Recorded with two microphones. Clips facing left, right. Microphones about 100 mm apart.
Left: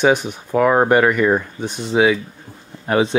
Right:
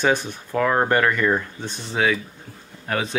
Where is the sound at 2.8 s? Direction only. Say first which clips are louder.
Left 8 dB; 25° left (ahead or behind).